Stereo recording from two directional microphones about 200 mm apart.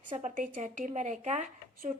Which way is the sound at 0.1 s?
40° right (ahead or behind).